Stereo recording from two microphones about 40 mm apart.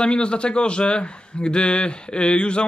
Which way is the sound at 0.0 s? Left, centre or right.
Left.